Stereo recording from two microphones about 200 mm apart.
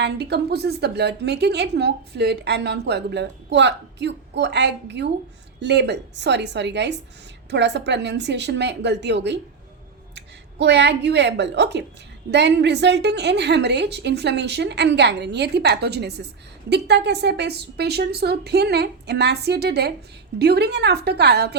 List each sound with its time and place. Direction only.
0.0 s a woman's voice: 55° right (ahead or behind)